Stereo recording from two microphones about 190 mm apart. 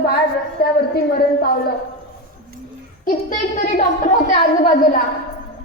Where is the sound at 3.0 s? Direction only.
45° left (ahead or behind).